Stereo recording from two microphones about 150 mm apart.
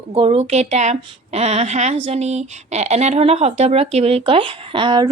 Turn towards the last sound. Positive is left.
turn(degrees=-30)  # may be behind; listen again after turning